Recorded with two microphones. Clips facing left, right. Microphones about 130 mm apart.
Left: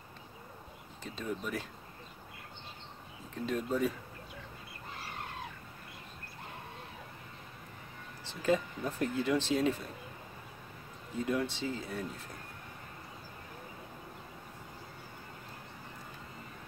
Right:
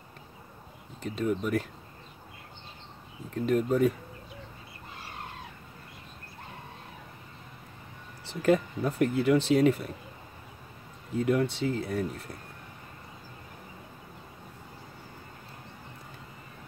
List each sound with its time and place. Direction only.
1.0 s speech: 60° right (ahead or behind)
3.4 s speech: 60° right (ahead or behind)
8.4 s speech: 65° right (ahead or behind)
11.1 s speech: 65° right (ahead or behind)